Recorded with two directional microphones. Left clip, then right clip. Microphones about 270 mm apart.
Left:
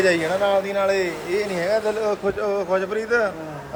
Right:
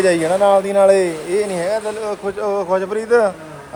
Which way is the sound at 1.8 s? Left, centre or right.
Centre.